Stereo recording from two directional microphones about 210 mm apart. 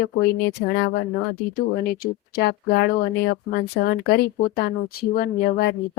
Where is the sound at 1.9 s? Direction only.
45° left (ahead or behind).